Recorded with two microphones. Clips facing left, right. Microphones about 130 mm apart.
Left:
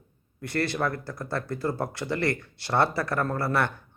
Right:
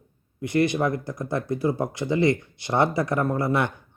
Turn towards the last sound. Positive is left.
turn(degrees=-15)  # may be behind; listen again after turning